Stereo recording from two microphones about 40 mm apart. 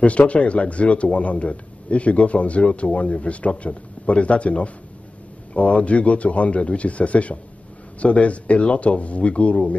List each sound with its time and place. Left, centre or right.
0.3 s a man's voice: left